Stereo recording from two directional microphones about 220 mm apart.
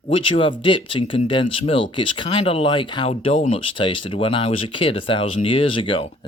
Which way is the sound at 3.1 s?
35° left (ahead or behind).